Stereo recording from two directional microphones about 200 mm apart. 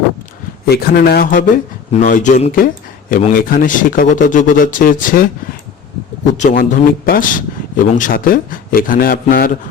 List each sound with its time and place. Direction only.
0.7 s a man's voice: 50° left (ahead or behind)
6.3 s a man's voice: 35° left (ahead or behind)